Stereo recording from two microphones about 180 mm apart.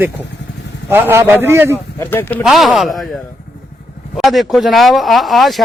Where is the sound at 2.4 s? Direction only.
Centre (ahead or behind).